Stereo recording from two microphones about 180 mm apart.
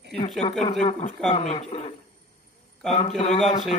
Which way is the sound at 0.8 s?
35° left (ahead or behind).